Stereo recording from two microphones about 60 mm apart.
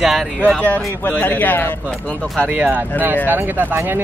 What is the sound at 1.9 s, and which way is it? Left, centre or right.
Speech, centre.